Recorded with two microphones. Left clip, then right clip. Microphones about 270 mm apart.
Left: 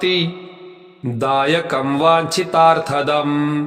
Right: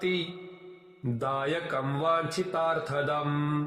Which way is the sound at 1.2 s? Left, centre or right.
Left.